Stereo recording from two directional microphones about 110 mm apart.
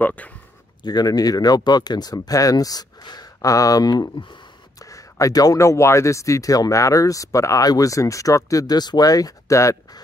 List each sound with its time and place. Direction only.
0.0 s speech: 15° left (ahead or behind)
0.8 s speech: 35° left (ahead or behind)
4.8 s speech: 30° left (ahead or behind)